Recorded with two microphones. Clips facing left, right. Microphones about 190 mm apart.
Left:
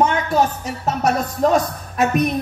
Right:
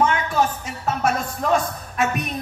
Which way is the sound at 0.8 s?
40° left (ahead or behind).